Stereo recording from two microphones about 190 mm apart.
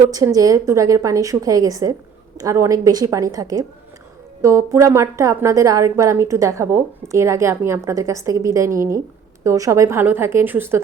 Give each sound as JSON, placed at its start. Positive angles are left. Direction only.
{"t": 0.1, "sound": "a woman's voice", "side_deg": -20}